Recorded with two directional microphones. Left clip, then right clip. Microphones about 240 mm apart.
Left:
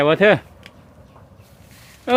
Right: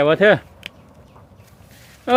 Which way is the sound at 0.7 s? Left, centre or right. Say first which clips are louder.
Right 8 dB; right.